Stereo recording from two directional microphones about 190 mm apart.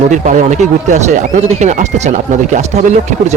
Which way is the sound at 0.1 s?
40° right (ahead or behind).